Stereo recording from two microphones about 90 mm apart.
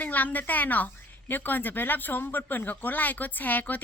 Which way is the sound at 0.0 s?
20° left (ahead or behind).